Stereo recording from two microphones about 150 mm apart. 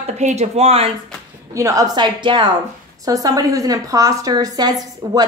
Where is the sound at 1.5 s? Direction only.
20° right (ahead or behind).